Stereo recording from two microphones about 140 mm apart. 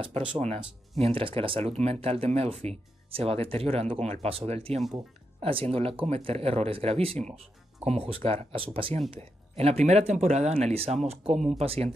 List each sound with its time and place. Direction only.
0.4 s speech: 45° right (ahead or behind)